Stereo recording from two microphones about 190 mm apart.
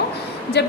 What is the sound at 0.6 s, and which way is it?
Speech, 60° left (ahead or behind).